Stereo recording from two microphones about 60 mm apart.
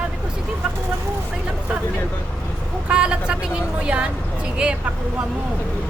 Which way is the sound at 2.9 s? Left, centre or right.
Centre.